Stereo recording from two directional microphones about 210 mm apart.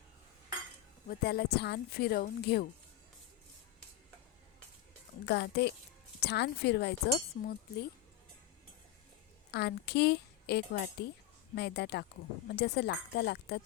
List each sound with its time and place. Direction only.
1.0 s speech: 50° left (ahead or behind)
5.2 s speech: 50° left (ahead or behind)
9.5 s speech: 50° left (ahead or behind)